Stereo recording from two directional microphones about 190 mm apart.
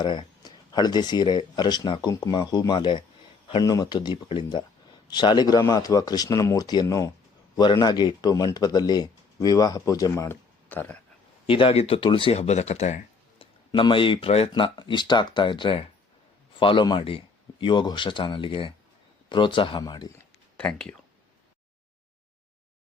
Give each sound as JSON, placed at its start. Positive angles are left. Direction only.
{"t": 0.0, "sound": "speech", "side_deg": 25}
{"t": 11.4, "sound": "speech", "side_deg": 30}
{"t": 13.4, "sound": "speech", "side_deg": 25}
{"t": 20.6, "sound": "speech", "side_deg": 5}